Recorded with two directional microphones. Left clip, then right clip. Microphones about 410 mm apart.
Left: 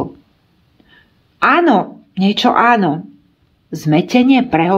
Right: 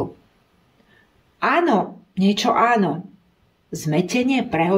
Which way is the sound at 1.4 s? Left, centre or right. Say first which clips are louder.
Left 7 dB; centre.